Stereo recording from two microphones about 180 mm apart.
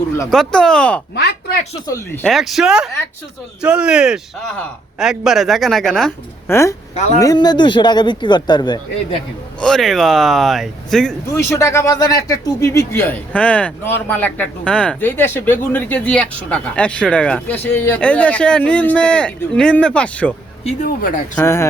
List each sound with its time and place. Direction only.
0.3 s speech: 5° left (ahead or behind)
1.1 s speech: 70° left (ahead or behind)
1.9 s speech: 15° left (ahead or behind)
2.3 s speech: centre (ahead or behind)
6.5 s speech: 15° left (ahead or behind)
9.6 s speech: centre (ahead or behind)
11.3 s speech: 15° left (ahead or behind)
20.8 s speech: 55° left (ahead or behind)
21.3 s speech: 15° left (ahead or behind)